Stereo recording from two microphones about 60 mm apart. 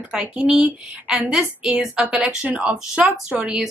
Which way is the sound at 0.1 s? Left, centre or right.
Centre.